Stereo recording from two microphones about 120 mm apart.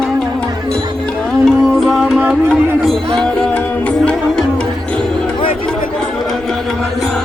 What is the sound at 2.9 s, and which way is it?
Music, 5° left (ahead or behind).